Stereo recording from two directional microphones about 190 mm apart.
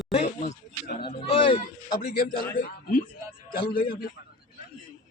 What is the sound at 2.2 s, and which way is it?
Speech, 45° left (ahead or behind).